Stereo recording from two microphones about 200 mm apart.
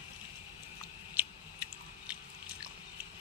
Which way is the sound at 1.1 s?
10° right (ahead or behind).